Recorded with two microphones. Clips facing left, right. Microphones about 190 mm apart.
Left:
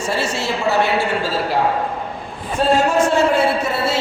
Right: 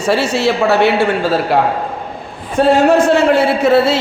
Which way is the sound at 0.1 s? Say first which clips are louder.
Right 9 dB; 70° right (ahead or behind).